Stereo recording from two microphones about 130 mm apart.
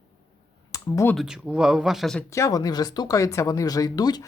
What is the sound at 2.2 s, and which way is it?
Speech, 25° left (ahead or behind).